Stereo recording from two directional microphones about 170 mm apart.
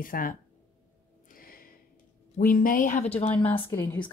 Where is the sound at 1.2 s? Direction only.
55° left (ahead or behind).